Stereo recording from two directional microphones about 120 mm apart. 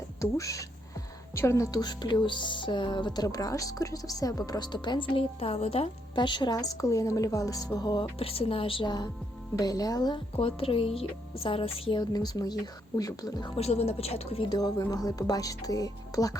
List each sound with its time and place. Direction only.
0.2 s speech: 25° left (ahead or behind); by 5.9 s 55° left (ahead or behind)
6.1 s speech: 40° left (ahead or behind)
8.2 s a woman's voice: 50° left (ahead or behind); by 10.2 s 30° left (ahead or behind)
10.3 s a woman's voice: 50° left (ahead or behind)
12.1 s speech: 35° left (ahead or behind)
13.6 s a woman's voice: 60° left (ahead or behind)
14.5 s speech: 30° left (ahead or behind)